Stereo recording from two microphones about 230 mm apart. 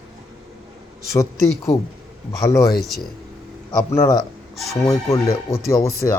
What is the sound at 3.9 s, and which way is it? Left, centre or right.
Speech, centre.